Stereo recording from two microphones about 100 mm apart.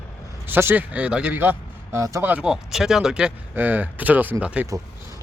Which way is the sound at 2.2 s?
15° right (ahead or behind).